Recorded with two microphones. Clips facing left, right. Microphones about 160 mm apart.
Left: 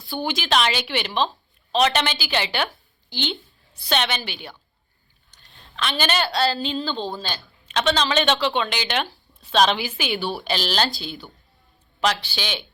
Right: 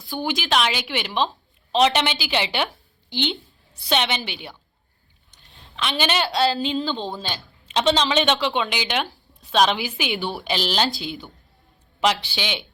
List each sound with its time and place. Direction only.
0.1 s a woman's voice: 10° right (ahead or behind)